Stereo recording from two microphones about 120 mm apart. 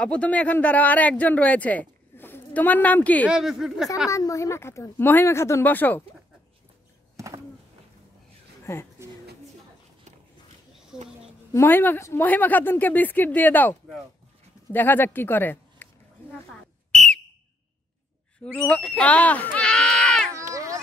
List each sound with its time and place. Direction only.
0.0 s speech: 10° left (ahead or behind)
3.3 s speech: 5° right (ahead or behind)
4.1 s speech: 25° left (ahead or behind)
7.2 s a sound: 25° right (ahead or behind)
8.7 s speech: 20° left (ahead or behind)
11.5 s a woman's voice: 15° left (ahead or behind)
16.9 s whistle: 5° left (ahead or behind)
18.7 s a woman's voice: 10° left (ahead or behind)
20.3 s a sound: 25° right (ahead or behind)